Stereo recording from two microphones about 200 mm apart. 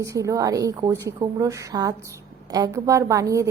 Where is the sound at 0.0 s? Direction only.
15° right (ahead or behind).